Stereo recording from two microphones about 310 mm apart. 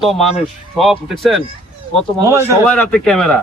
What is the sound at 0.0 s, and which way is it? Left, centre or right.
Speech, centre.